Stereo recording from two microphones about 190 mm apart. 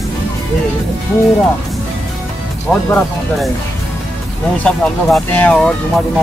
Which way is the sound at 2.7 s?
5° left (ahead or behind).